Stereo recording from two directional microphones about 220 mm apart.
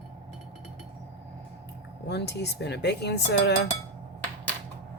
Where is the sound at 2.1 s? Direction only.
50° left (ahead or behind).